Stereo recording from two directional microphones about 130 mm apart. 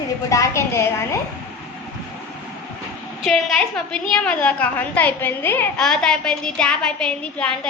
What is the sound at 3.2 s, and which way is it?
A woman's voice, centre (ahead or behind).